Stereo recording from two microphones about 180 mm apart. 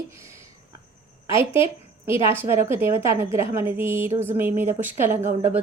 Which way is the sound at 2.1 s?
15° right (ahead or behind).